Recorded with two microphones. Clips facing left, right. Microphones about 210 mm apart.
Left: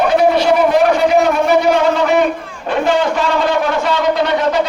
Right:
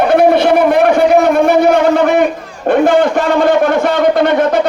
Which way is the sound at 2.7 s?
55° right (ahead or behind).